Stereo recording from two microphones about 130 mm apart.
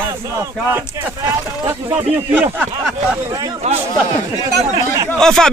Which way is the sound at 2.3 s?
15° right (ahead or behind).